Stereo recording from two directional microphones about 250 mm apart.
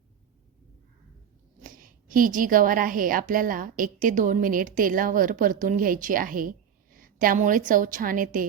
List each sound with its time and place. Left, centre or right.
1.6 s a woman's voice: right